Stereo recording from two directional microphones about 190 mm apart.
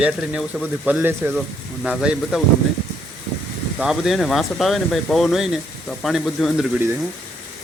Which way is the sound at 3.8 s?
Centre (ahead or behind).